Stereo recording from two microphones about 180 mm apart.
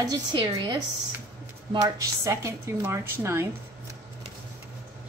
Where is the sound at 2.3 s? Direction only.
15° right (ahead or behind).